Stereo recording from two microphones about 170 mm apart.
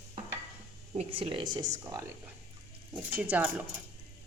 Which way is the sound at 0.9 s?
35° right (ahead or behind).